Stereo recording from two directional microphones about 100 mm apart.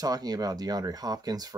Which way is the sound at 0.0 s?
40° right (ahead or behind).